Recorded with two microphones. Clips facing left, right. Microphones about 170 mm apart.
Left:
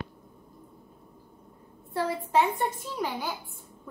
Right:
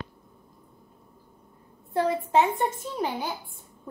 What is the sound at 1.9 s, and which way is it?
A child's voice, 20° right (ahead or behind).